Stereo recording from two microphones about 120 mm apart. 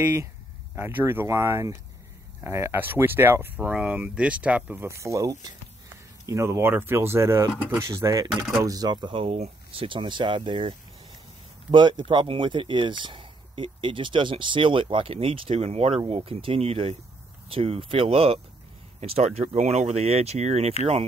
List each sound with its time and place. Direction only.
0.7 s speech: 20° right (ahead or behind)
3.5 s speech: 10° right (ahead or behind); by 8.3 s 25° right (ahead or behind)
8.3 s speech: 5° right (ahead or behind)
8.6 s speech: 35° right (ahead or behind); by 16.0 s 60° right (ahead or behind)
16.1 s speech: 50° right (ahead or behind)